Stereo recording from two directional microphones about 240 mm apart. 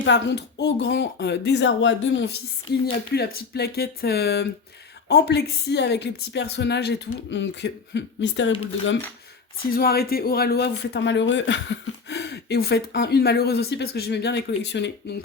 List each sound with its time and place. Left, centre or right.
0.0 s speech: left
9.7 s speech: left